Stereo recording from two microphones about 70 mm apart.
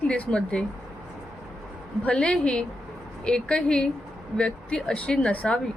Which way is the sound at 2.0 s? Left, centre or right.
Centre.